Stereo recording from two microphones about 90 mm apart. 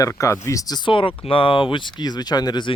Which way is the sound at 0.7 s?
65° left (ahead or behind).